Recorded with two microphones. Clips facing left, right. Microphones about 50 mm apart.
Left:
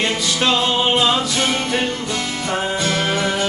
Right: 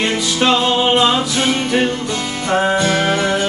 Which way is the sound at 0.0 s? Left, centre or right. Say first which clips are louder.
Right 3 dB; centre.